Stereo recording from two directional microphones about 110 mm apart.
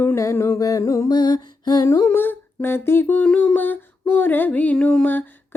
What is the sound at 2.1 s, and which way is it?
Humming, 20° left (ahead or behind).